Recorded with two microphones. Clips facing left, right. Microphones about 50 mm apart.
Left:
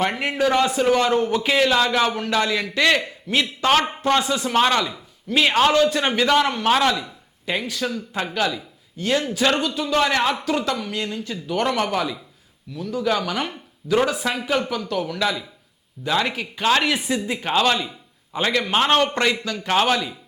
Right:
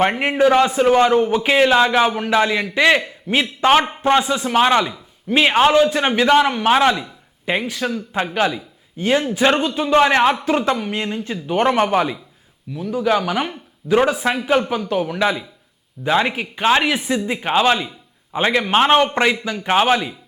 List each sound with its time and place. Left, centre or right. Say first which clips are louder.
0.0 s a man's voice: right 5 dB; right
4.8 s a man's voice: right 4 dB; right
12.7 s a man's voice: right 4 dB; centre